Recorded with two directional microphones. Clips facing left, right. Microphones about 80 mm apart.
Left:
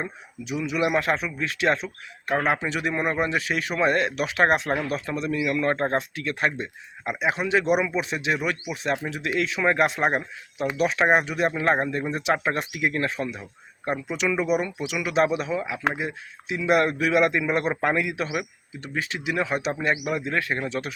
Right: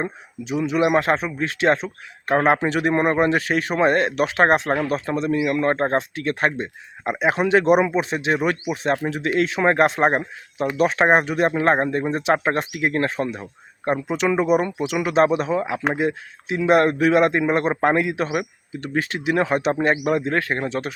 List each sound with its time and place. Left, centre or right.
0.0 s a man's voice: right